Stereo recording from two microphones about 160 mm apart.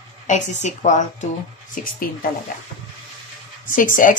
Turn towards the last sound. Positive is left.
turn(degrees=55)  # may be behind; listen again after turning